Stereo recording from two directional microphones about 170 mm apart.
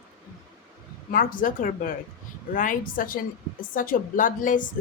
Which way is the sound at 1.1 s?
55° left (ahead or behind).